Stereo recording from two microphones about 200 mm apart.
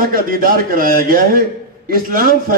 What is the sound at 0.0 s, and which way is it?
A man's voice, 45° right (ahead or behind).